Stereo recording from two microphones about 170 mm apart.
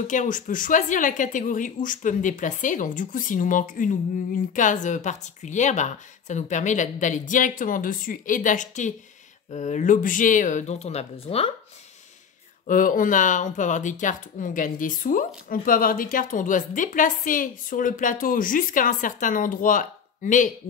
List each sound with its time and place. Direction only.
0.0 s speech: 45° left (ahead or behind)
12.6 s speech: 50° left (ahead or behind)